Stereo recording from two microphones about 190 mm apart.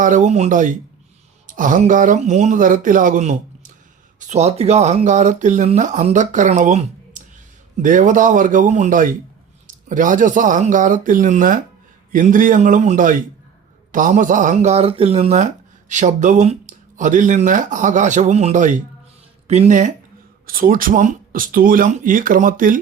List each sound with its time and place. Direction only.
0.0 s speech: 40° right (ahead or behind)